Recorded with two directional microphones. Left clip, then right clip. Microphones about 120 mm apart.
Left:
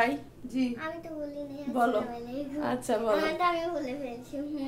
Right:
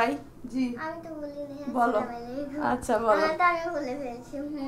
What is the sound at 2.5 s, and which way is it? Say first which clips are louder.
Speech: right 4 dB; 5° right (ahead or behind).